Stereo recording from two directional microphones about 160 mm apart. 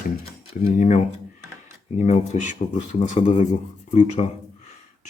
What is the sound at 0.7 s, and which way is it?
Speech, 50° left (ahead or behind).